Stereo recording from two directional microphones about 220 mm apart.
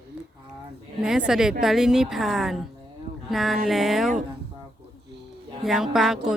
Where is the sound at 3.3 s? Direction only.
Centre (ahead or behind).